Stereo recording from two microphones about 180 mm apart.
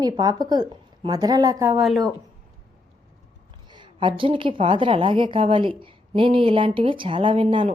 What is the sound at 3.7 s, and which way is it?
A woman's voice, 25° right (ahead or behind).